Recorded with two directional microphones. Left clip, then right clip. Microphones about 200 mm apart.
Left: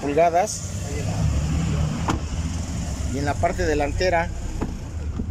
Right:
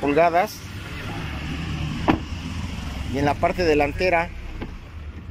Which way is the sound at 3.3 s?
Centre (ahead or behind).